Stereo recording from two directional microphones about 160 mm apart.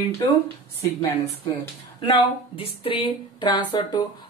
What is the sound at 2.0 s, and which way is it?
Speech, 35° left (ahead or behind).